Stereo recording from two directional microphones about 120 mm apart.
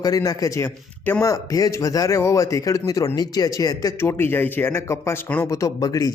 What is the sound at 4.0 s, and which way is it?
Speech, 20° left (ahead or behind).